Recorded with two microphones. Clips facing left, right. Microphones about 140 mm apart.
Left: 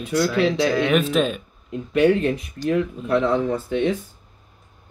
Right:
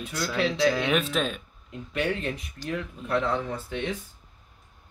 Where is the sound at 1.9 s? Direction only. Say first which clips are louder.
Left 11 dB; 65° left (ahead or behind).